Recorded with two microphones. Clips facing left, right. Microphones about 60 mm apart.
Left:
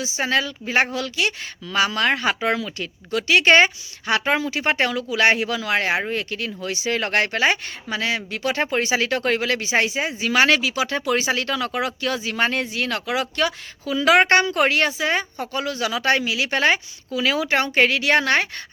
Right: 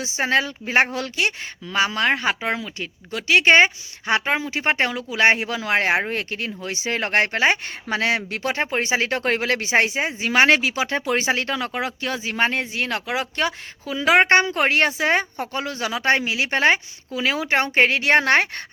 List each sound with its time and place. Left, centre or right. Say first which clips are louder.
0.0 s speech: right 1 dB; right
7.9 s speech: right 3 dB; right
8.6 s speech: left 1 dB; right
14.7 s speech: right 2 dB; right